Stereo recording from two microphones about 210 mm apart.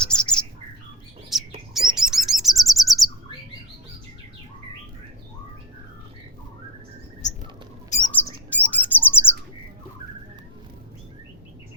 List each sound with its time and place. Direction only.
0.0 s bird: 5° left (ahead or behind)
1.3 s bird: centre (ahead or behind)
7.2 s a sound: 35° left (ahead or behind)
8.0 s bird: 10° left (ahead or behind)